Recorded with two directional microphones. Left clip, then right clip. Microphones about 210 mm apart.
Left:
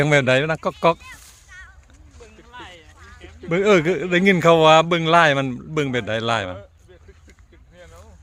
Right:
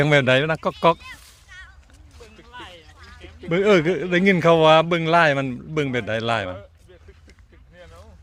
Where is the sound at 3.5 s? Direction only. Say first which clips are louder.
Left 1 dB; centre (ahead or behind).